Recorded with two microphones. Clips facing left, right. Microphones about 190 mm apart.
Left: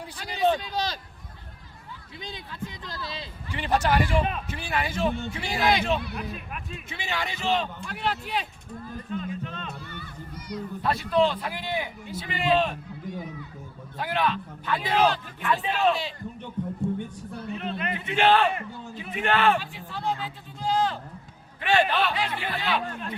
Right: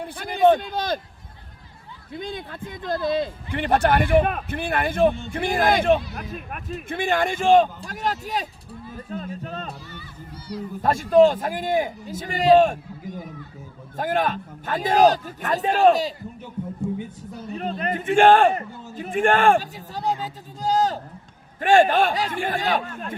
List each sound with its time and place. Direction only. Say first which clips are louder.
0.0 s speech: right 7 dB; 55° right (ahead or behind)
2.1 s a man's voice: right 8 dB; 50° right (ahead or behind)
9.8 s speech: even; 55° left (ahead or behind)
10.5 s speech: right 2 dB; 30° right (ahead or behind)
10.8 s a man's voice: right 8 dB; 45° right (ahead or behind)
13.9 s a man's voice: right 4 dB; 45° right (ahead or behind)
17.5 s a man's voice: right 5 dB; 40° right (ahead or behind)